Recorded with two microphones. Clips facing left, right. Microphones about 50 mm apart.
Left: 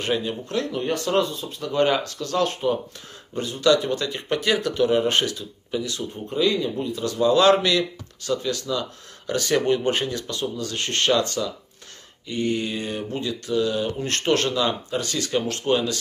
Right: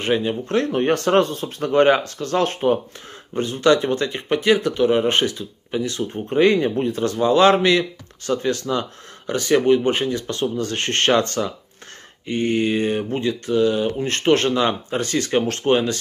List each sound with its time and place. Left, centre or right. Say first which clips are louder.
0.0 s speech: right 4 dB; right
0.6 s speech: right 6 dB; right
4.3 s speech: right 5 dB; right
6.2 s speech: right 6 dB; right
9.3 s speech: right 5 dB; right
10.3 s speech: right 5 dB; right